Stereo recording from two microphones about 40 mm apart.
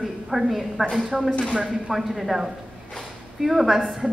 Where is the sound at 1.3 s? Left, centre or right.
Left.